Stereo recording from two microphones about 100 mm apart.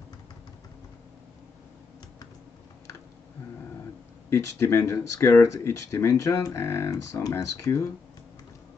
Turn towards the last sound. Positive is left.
turn(degrees=30)  # may be behind; listen again after turning